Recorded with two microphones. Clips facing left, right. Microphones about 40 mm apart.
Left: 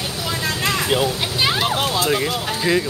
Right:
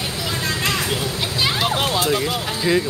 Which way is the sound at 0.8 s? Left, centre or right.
Left.